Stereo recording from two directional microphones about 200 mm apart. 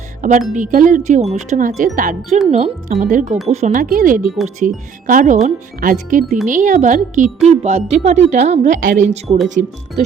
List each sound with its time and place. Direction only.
0.2 s a woman's voice: 40° right (ahead or behind)